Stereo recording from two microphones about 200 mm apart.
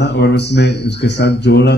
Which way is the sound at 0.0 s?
55° left (ahead or behind).